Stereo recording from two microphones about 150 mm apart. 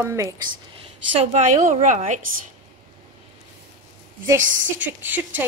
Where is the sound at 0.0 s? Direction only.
20° right (ahead or behind).